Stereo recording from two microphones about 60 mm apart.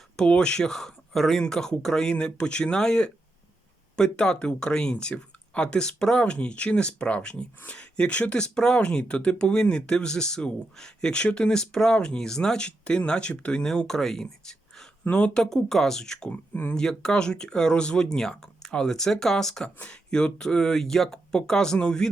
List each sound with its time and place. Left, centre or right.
0.3 s speech: centre
16.3 s speech: left
16.7 s speech: centre